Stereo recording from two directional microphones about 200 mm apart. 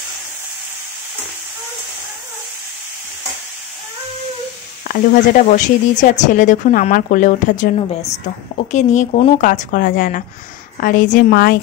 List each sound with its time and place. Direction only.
4.8 s a woman's voice: 45° left (ahead or behind)